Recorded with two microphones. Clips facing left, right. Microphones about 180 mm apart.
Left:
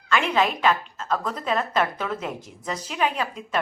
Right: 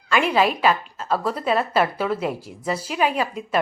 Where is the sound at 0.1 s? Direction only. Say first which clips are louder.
Right 3 dB; 10° right (ahead or behind).